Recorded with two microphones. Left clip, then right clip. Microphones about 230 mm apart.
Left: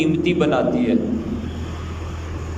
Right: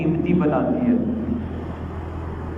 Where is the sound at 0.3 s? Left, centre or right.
Left.